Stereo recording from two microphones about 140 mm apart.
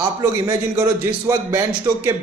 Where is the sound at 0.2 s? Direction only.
15° right (ahead or behind).